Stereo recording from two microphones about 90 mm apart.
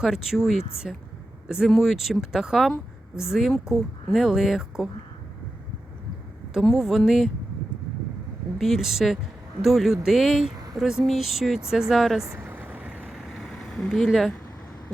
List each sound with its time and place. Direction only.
0.0 s speech: 5° right (ahead or behind)
6.7 s speech: centre (ahead or behind)
8.5 s speech: centre (ahead or behind)
12.4 s vehicle: 20° right (ahead or behind)
13.1 s vehicle: centre (ahead or behind)